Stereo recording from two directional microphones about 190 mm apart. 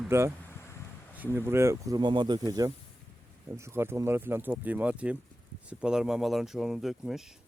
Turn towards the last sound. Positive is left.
turn(degrees=0)  # may be behind; listen again after turning